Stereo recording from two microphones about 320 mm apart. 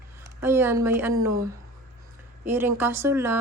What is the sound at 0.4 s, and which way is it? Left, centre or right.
Speech, centre.